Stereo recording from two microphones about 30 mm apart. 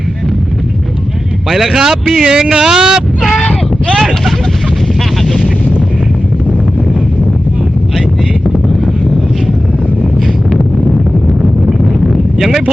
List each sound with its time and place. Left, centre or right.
1.5 s speech: centre
2.2 s speech: right
3.9 s speech: centre
11.7 s a sound: centre